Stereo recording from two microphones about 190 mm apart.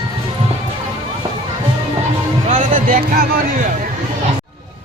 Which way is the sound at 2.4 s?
40° right (ahead or behind).